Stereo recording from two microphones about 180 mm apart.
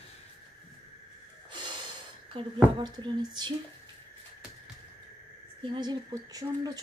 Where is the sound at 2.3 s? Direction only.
25° right (ahead or behind).